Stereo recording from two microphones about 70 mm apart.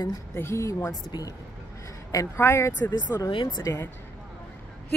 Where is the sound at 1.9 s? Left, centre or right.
Left.